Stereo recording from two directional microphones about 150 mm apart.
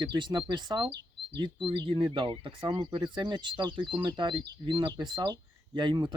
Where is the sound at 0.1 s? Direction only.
30° right (ahead or behind).